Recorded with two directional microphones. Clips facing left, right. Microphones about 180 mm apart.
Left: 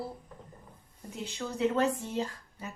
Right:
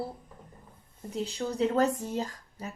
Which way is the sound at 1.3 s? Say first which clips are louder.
Right 1 dB; 35° right (ahead or behind).